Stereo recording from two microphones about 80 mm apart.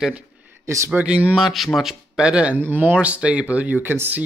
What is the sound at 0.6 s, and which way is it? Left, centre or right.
Speech, right.